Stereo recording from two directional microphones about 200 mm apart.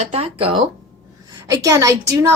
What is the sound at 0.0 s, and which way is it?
Speech, 30° right (ahead or behind).